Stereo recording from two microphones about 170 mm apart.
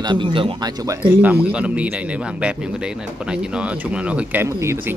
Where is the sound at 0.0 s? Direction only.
25° right (ahead or behind).